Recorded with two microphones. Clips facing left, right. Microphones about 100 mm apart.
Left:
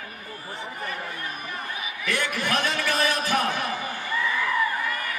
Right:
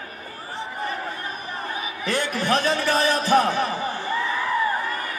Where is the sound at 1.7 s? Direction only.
30° right (ahead or behind).